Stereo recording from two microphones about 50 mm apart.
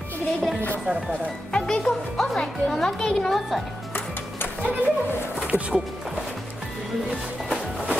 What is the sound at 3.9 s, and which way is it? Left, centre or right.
Music, left.